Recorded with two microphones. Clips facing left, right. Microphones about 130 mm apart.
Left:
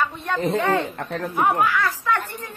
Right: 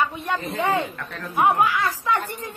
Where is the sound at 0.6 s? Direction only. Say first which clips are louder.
Even; 15° right (ahead or behind).